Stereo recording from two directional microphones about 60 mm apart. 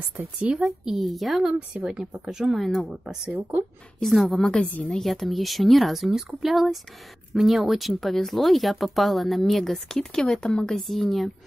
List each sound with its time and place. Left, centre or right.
0.4 s speech: right
0.8 s speech: centre
1.4 s speech: centre
2.5 s speech: centre
4.0 s speech: centre
4.5 s a woman's voice: centre
5.0 s speech: centre